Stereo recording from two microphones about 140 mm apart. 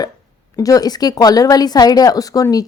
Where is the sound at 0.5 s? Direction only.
25° left (ahead or behind).